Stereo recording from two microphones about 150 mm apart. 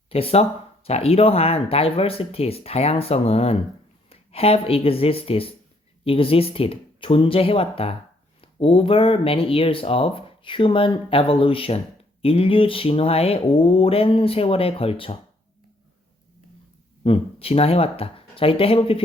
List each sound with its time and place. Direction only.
0.1 s speech: 40° left (ahead or behind)
17.0 s speech: 40° left (ahead or behind)